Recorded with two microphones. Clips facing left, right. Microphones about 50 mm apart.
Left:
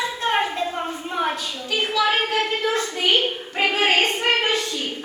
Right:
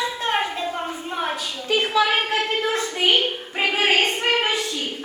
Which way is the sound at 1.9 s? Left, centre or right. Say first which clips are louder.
Left 1 dB; right.